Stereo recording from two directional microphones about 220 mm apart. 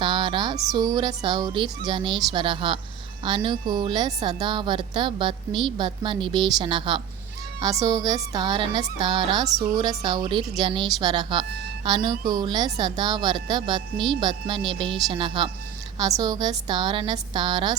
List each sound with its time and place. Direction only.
0.0 s speech: 20° right (ahead or behind)